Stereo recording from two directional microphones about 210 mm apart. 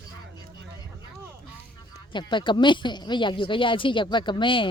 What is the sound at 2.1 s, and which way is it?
Speech, 20° left (ahead or behind).